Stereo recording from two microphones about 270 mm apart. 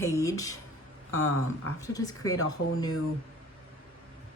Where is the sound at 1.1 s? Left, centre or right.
Left.